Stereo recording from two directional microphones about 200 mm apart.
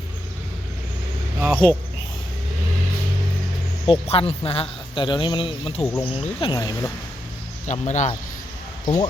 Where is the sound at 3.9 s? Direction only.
30° left (ahead or behind).